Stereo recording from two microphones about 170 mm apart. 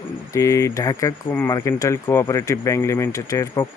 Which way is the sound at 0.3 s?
20° left (ahead or behind).